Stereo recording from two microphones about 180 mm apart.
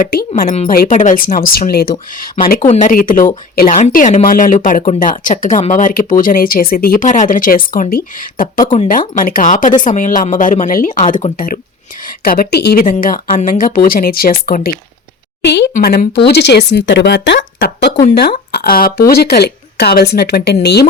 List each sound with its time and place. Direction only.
0.0 s speech: 55° left (ahead or behind)
2.6 s speech: 45° left (ahead or behind)
15.4 s speech: 70° left (ahead or behind)
15.7 s speech: 55° left (ahead or behind)